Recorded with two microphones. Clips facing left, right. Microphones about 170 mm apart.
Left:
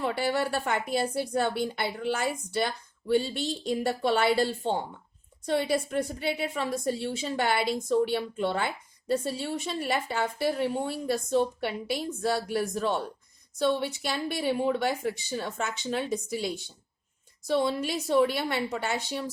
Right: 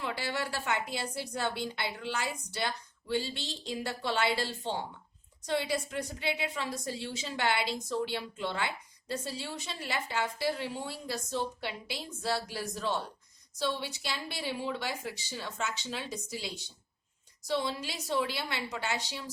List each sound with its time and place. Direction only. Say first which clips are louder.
0.0 s speech: left 7 dB; 50° left (ahead or behind)